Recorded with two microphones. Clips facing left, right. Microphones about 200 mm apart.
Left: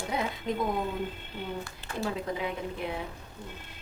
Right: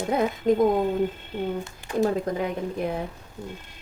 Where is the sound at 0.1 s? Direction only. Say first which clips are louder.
Right 10 dB; 50° right (ahead or behind).